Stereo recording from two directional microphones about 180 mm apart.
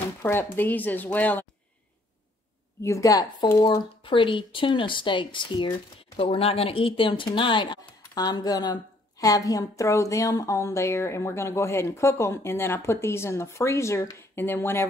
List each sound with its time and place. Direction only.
0.2 s a woman's voice: 10° left (ahead or behind)
2.8 s a woman's voice: 15° left (ahead or behind)